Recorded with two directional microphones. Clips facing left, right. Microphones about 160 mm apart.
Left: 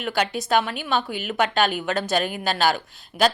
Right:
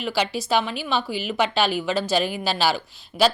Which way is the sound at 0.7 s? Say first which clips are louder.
Even; 50° left (ahead or behind).